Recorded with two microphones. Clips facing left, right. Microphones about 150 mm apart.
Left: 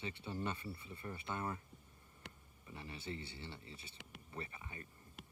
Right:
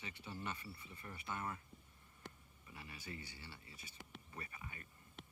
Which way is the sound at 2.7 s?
25° left (ahead or behind).